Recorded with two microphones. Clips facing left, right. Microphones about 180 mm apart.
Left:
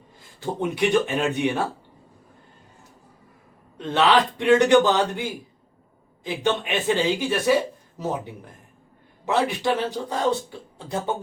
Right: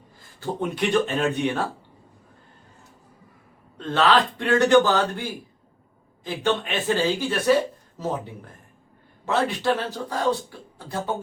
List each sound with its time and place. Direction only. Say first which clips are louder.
0.3 s speech: left 1 dB; 15° left (ahead or behind)
3.8 s speech: left 1 dB; 15° left (ahead or behind)
6.2 s speech: even; 15° left (ahead or behind)